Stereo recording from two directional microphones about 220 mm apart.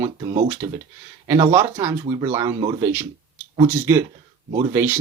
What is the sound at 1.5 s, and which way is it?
Speech, 10° right (ahead or behind).